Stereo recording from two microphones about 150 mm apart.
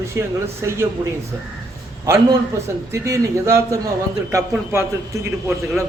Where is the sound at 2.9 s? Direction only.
20° right (ahead or behind).